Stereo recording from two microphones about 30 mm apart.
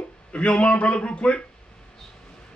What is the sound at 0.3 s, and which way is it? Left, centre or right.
A man's voice, left.